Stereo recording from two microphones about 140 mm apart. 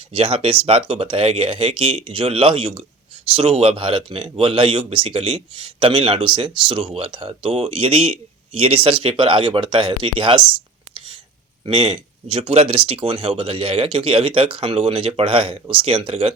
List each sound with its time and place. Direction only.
0.1 s speech: 45° right (ahead or behind)
10.9 s a sound: 35° right (ahead or behind)
11.6 s speech: 35° right (ahead or behind)